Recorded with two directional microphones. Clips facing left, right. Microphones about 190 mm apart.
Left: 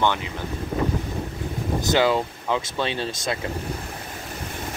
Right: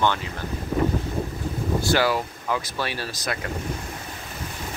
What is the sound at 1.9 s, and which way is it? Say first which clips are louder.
Speech: left 3 dB; 20° left (ahead or behind).